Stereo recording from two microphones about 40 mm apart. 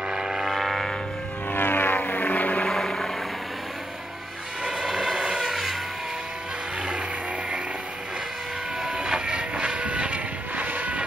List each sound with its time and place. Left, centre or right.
0.1 s a sound: centre
0.5 s a sound: centre
1.5 s aircraft: left
2.7 s vehicle: centre
4.6 s vehicle: centre
8.8 s train: right